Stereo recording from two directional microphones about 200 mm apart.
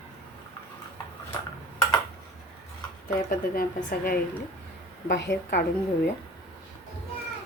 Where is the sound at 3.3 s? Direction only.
45° left (ahead or behind).